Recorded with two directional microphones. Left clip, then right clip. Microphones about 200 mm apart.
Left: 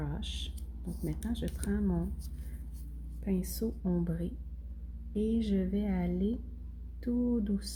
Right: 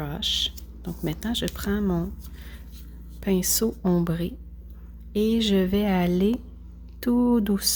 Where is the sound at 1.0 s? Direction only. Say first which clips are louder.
Right 11 dB; 40° right (ahead or behind).